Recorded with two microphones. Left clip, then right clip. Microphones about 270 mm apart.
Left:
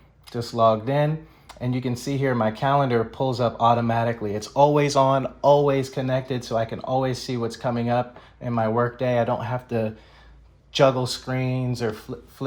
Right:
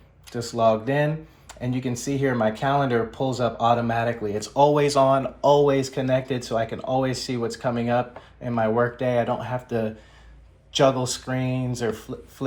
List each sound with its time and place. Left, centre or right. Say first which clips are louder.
0.9 s speech: even; left